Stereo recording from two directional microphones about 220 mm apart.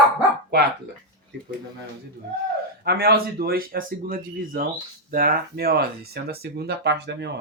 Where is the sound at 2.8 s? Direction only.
45° right (ahead or behind).